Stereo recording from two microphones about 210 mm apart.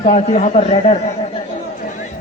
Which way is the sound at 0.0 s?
35° left (ahead or behind).